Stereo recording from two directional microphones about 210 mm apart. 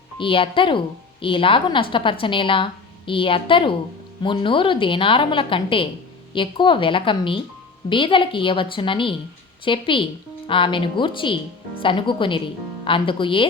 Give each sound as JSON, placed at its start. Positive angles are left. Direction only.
{"t": 0.2, "sound": "a woman's voice", "side_deg": 25}